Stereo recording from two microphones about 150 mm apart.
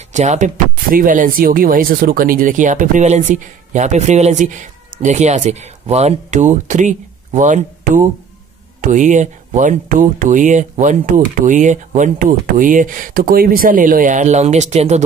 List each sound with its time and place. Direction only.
0.1 s speech: 50° right (ahead or behind)